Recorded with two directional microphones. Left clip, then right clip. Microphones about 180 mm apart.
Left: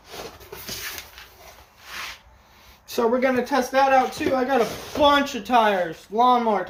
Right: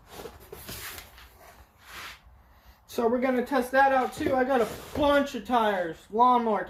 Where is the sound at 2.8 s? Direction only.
30° left (ahead or behind).